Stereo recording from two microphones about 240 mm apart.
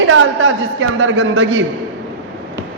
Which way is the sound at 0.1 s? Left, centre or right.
Right.